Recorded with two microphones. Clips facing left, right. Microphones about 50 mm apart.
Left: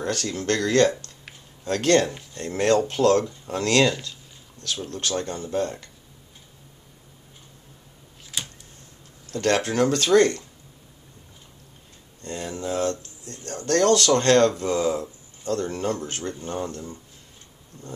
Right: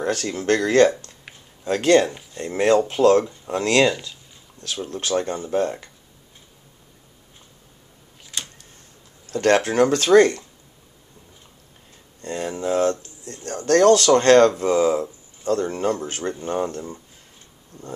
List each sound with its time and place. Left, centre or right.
0.0 s speech: centre
1.2 s a sound: centre
2.3 s speech: centre
4.7 s speech: right
8.3 s a sound: centre
9.3 s speech: right
12.2 s speech: right